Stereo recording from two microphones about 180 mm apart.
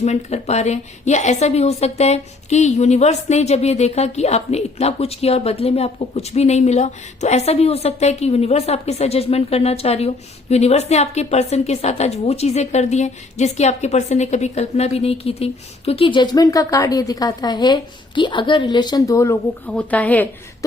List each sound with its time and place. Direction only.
0.0 s a woman's voice: 40° left (ahead or behind); by 20.7 s 10° left (ahead or behind)